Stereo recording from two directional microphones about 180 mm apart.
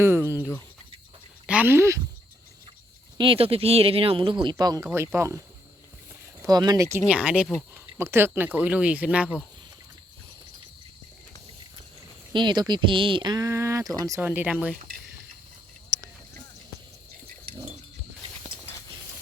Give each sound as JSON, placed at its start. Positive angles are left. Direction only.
{"t": 0.0, "sound": "speech", "side_deg": -15}
{"t": 3.2, "sound": "speech", "side_deg": -30}
{"t": 6.4, "sound": "speech", "side_deg": -20}
{"t": 7.1, "sound": "speech", "side_deg": -5}
{"t": 7.9, "sound": "speech", "side_deg": -15}
{"t": 12.3, "sound": "speech", "side_deg": -25}
{"t": 15.9, "sound": "a sound", "side_deg": -20}